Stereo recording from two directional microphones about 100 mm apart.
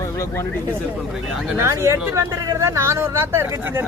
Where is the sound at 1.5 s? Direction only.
30° right (ahead or behind).